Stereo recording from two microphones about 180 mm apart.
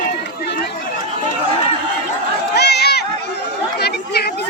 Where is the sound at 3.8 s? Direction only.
65° left (ahead or behind).